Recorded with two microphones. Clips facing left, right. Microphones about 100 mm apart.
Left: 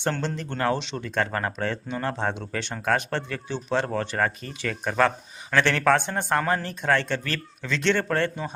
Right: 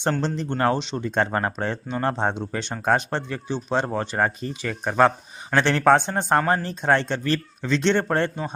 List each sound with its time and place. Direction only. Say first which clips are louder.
0.2 s speech: right 4 dB; 20° right (ahead or behind)